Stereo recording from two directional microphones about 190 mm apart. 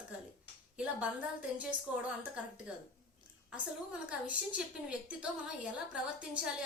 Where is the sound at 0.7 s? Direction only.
5° right (ahead or behind).